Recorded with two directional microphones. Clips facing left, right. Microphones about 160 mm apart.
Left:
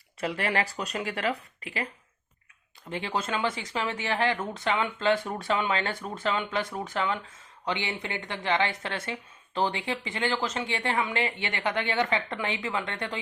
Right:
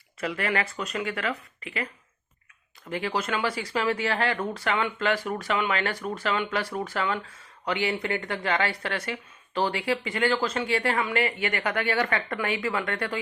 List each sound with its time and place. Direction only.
0.2 s speech: 30° left (ahead or behind)
3.2 s speech: 25° left (ahead or behind)